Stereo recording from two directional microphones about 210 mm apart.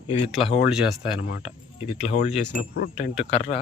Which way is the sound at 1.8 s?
30° left (ahead or behind).